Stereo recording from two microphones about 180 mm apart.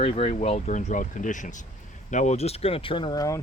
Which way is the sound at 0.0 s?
35° left (ahead or behind).